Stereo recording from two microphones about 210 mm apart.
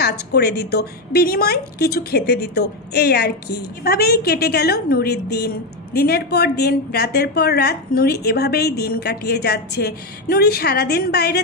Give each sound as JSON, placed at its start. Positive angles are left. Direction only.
{"t": 0.0, "sound": "a woman's voice", "side_deg": 50}